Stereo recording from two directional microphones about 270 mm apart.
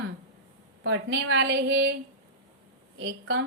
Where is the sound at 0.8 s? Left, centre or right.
Right.